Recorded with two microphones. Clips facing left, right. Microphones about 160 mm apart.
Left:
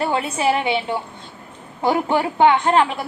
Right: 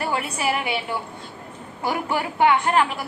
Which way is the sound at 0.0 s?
25° left (ahead or behind).